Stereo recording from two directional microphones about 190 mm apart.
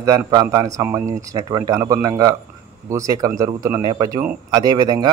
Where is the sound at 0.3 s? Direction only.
20° right (ahead or behind).